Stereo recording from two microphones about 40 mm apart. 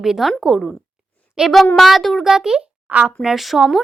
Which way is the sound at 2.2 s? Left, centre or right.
Centre.